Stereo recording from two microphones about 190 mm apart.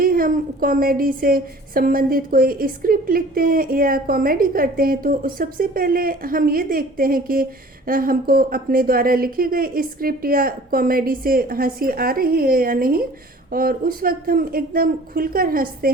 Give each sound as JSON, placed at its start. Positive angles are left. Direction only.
{"t": 0.0, "sound": "a woman's voice", "side_deg": -50}